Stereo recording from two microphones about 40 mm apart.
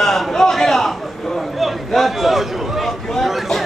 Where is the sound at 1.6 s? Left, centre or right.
Centre.